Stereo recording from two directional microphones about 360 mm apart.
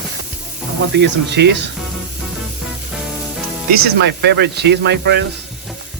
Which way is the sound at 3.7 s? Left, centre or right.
Right.